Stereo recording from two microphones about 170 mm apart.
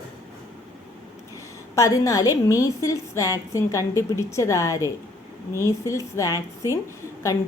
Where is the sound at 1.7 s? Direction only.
20° left (ahead or behind).